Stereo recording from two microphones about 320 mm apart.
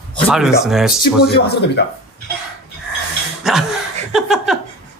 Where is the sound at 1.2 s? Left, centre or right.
Left.